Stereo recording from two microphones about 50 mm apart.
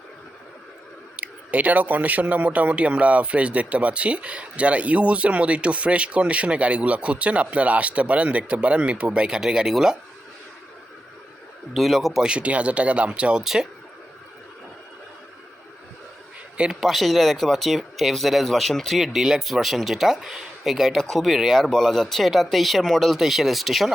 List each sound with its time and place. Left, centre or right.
1.1 s speech: right; by 10.0 s centre
11.7 s speech: centre
12.3 s speech: right
13.4 s speech: centre
16.8 s speech: centre